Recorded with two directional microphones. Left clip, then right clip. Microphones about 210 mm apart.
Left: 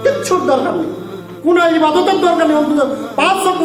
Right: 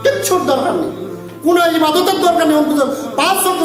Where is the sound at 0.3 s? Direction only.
5° left (ahead or behind).